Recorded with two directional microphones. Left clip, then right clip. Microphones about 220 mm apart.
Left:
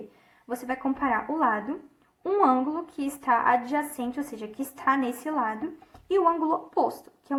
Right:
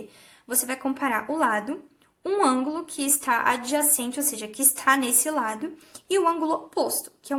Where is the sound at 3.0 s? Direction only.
15° right (ahead or behind).